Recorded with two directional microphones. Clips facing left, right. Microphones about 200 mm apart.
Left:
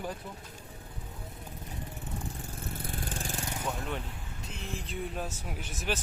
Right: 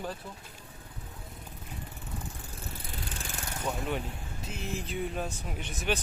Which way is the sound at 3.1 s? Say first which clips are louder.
Left 4 dB; 45° left (ahead or behind).